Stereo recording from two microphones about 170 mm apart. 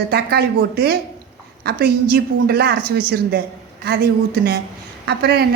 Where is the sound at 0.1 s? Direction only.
70° right (ahead or behind).